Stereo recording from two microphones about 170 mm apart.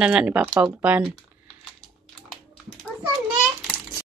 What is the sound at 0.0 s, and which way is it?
Speech, 5° right (ahead or behind).